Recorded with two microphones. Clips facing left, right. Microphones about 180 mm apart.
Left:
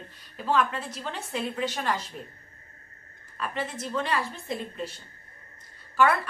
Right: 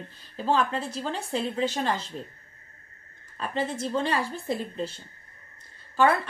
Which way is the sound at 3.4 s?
30° right (ahead or behind).